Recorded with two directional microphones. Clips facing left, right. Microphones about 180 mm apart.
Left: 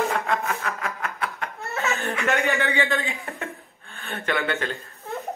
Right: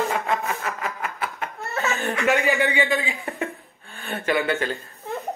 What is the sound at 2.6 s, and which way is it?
A man's voice, 15° right (ahead or behind).